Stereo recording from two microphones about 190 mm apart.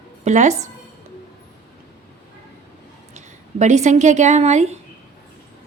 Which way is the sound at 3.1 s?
40° right (ahead or behind).